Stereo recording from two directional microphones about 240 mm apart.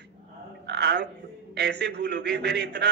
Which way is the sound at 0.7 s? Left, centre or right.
Right.